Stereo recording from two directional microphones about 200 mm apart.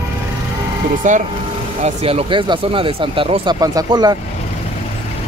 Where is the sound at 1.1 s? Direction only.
40° right (ahead or behind); by 4.1 s 20° right (ahead or behind).